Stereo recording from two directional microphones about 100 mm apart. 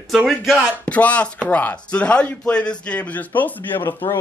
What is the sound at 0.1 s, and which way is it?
Speech, 5° right (ahead or behind).